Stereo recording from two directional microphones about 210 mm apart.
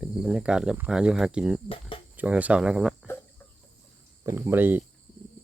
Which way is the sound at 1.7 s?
25° left (ahead or behind).